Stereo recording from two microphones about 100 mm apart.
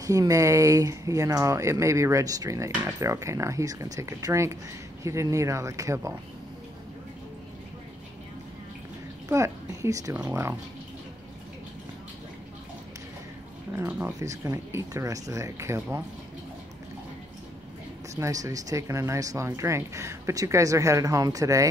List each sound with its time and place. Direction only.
0.0 s speech: 35° right (ahead or behind)
9.3 s a woman's voice: 30° right (ahead or behind)
13.7 s speech: 20° right (ahead or behind)
14.2 s speech: 35° right (ahead or behind)
18.1 s speech: 35° right (ahead or behind)